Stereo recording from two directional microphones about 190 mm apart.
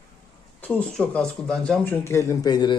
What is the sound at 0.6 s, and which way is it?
Speech, 10° left (ahead or behind).